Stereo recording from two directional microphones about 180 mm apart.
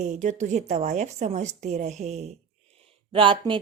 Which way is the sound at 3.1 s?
25° right (ahead or behind).